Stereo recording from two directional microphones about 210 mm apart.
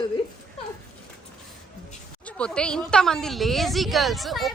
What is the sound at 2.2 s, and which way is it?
A woman's voice, 5° left (ahead or behind).